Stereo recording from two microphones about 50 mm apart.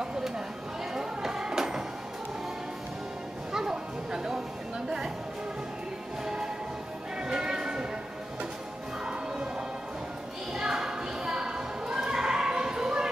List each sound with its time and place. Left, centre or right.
0.9 s music: centre
3.5 s a sound: centre
4.8 s music: centre
6.2 s music: centre
9.0 s music: centre
10.5 s a sound: centre